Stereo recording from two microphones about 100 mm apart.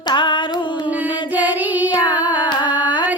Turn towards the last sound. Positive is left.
turn(degrees=50)  # may be behind; listen again after turning